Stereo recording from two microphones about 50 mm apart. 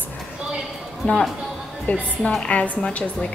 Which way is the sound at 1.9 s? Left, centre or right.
Left.